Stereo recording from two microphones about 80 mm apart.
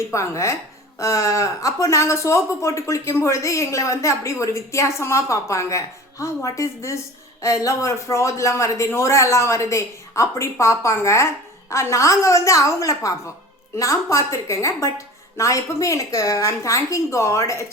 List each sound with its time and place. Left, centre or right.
0.1 s speech: left